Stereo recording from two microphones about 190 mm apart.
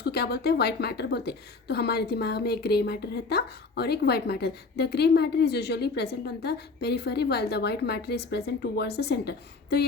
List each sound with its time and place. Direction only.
0.0 s a woman's voice: 60° left (ahead or behind)